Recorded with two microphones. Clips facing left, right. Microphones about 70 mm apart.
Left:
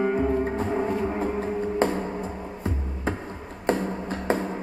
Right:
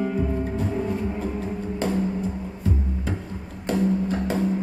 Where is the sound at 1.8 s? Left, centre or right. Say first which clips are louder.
Even; left.